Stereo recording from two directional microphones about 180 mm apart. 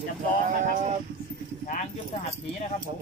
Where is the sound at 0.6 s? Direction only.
40° right (ahead or behind).